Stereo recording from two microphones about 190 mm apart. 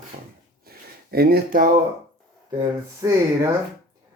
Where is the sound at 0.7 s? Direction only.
55° right (ahead or behind).